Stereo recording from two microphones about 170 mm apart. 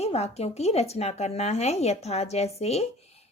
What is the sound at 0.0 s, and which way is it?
Speech, 40° left (ahead or behind).